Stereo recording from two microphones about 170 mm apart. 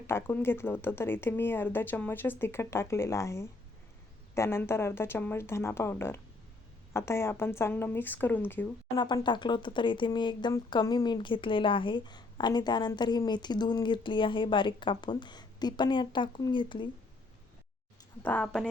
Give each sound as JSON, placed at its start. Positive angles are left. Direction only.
{"t": 0.1, "sound": "speech", "side_deg": 15}
{"t": 9.0, "sound": "speech", "side_deg": 25}
{"t": 18.2, "sound": "speech", "side_deg": 10}